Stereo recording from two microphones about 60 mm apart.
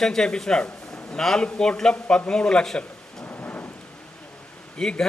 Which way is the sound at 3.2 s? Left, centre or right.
Left.